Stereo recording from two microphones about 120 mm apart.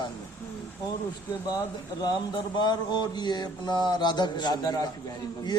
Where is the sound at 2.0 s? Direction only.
35° left (ahead or behind).